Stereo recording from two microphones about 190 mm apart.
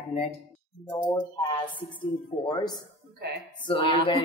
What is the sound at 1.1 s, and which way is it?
Speech, 10° left (ahead or behind).